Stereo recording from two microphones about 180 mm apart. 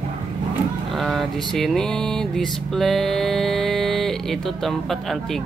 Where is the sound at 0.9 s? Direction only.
Centre (ahead or behind).